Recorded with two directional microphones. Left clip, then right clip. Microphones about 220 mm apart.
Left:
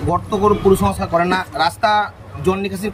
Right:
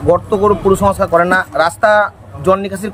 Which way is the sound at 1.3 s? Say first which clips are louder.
Right 5 dB; 30° right (ahead or behind).